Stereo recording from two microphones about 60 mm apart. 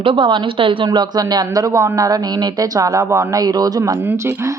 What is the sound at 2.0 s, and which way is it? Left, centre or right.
Speech, right.